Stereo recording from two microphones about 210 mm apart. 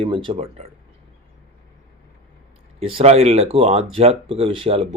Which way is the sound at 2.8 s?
25° right (ahead or behind).